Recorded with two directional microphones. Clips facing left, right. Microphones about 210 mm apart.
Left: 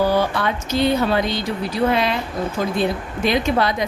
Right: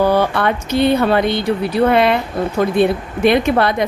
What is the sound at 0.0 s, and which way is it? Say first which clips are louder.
A woman's voice: right 4 dB; 60° right (ahead or behind).